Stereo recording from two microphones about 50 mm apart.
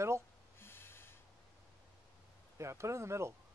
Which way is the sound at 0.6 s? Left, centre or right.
Left.